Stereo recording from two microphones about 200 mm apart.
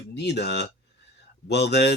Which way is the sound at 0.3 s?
55° left (ahead or behind).